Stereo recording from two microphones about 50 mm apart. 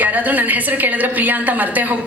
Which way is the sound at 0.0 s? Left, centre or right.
Right.